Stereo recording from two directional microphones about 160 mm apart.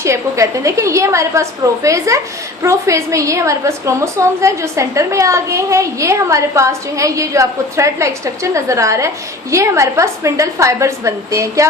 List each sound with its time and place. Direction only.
0.0 s a woman's voice: 20° right (ahead or behind)